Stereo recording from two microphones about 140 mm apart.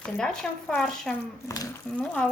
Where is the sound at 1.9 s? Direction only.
10° left (ahead or behind).